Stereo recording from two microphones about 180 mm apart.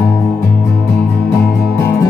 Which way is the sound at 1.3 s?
15° left (ahead or behind).